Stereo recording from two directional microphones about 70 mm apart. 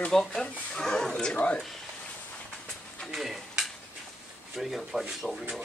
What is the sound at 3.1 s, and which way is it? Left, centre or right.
Stir, centre.